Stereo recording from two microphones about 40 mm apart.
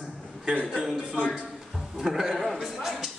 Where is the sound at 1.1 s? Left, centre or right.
Left.